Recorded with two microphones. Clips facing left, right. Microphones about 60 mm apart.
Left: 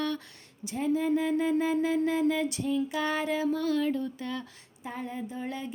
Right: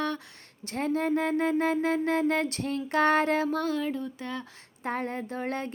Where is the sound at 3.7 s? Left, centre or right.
Right.